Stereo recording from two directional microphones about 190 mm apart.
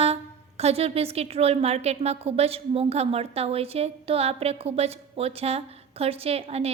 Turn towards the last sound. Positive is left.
turn(degrees=-30)  # may be behind; listen again after turning